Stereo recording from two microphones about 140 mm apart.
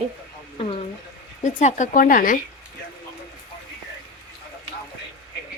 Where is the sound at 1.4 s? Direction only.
55° left (ahead or behind); by 2.4 s 80° left.